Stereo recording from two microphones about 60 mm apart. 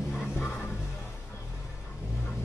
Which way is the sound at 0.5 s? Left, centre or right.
Left.